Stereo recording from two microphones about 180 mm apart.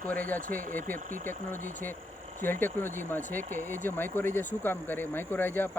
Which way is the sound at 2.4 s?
10° left (ahead or behind).